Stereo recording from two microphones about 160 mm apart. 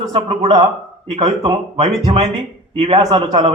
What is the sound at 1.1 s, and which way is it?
A man's voice, 40° right (ahead or behind).